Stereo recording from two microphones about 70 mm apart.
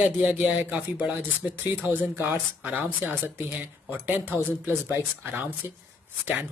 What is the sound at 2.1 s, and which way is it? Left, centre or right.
Speech, right.